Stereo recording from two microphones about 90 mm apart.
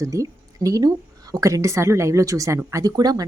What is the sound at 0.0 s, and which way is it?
Speech, 40° right (ahead or behind).